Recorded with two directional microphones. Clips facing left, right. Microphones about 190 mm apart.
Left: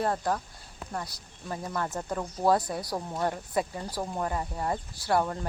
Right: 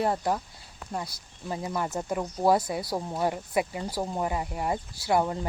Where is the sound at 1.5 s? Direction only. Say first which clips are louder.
Right 2 dB; 15° right (ahead or behind).